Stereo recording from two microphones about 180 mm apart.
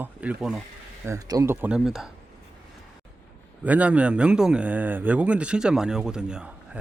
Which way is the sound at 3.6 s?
10° right (ahead or behind).